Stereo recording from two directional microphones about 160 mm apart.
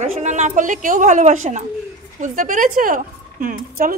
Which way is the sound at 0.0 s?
45° right (ahead or behind).